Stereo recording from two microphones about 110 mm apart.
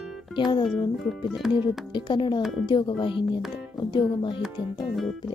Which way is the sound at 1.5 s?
45° left (ahead or behind).